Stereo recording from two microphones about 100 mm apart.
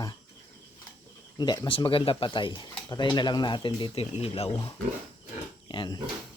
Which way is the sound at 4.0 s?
85° left.